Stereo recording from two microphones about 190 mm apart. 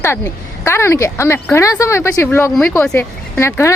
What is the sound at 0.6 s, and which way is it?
Speech, 15° left (ahead or behind).